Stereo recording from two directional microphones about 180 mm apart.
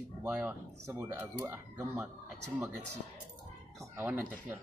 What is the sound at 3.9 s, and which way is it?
Speech, 10° right (ahead or behind).